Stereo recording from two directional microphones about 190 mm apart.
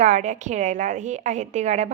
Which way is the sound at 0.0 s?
40° right (ahead or behind).